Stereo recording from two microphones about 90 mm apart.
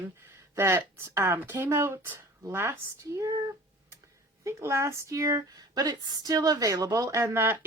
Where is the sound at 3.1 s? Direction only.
40° right (ahead or behind).